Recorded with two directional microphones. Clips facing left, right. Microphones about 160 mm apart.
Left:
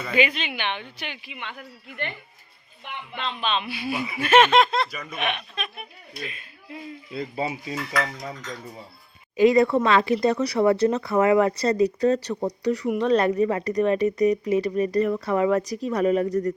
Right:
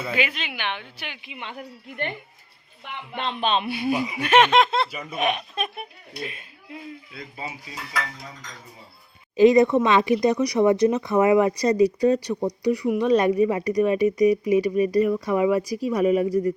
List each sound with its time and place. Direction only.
0.0 s speech: 5° right (ahead or behind)
1.2 s speech: 30° right (ahead or behind)
3.2 s a man's voice: 50° right (ahead or behind)
4.0 s speech: 15° right (ahead or behind); by 5.7 s 40° right (ahead or behind)
7.1 s speech: 30° left (ahead or behind)
9.3 s speech: 25° right (ahead or behind)